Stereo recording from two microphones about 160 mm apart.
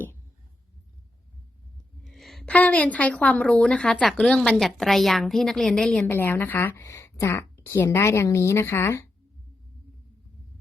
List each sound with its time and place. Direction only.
2.0 s a woman's voice: centre (ahead or behind)
6.1 s a woman's voice: 15° left (ahead or behind)